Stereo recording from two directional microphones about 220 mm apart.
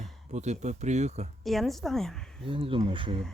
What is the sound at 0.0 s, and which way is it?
Speech, 30° right (ahead or behind).